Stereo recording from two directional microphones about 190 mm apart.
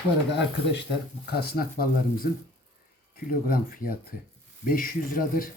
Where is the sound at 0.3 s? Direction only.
65° left (ahead or behind); by 5.5 s 50° left (ahead or behind).